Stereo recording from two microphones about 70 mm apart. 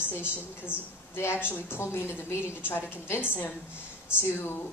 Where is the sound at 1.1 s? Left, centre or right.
Left.